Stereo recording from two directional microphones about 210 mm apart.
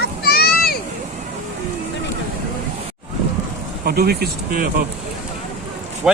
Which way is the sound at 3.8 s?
50° right (ahead or behind).